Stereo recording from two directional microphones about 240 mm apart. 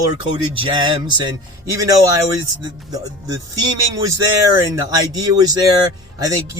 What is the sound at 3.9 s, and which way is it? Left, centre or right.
Speech, centre.